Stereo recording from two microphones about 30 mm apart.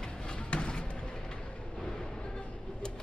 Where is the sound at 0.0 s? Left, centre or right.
Left.